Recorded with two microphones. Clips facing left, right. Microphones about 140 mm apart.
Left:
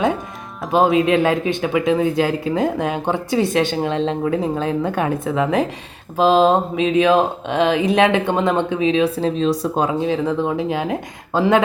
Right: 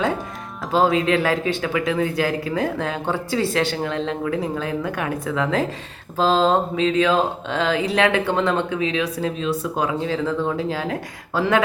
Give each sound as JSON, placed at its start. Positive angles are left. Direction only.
{"t": 0.7, "sound": "speech", "side_deg": 20}